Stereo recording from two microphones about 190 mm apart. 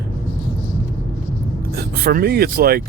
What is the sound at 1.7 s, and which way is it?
Speech, 55° right (ahead or behind).